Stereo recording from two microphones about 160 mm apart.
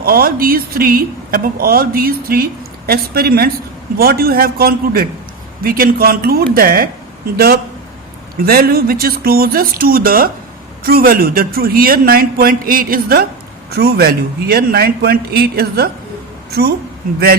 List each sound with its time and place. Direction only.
0.0 s speech: 70° right (ahead or behind)
13.7 s a woman's voice: 75° right (ahead or behind)